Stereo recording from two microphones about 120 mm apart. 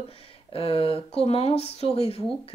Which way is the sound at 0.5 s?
50° left (ahead or behind).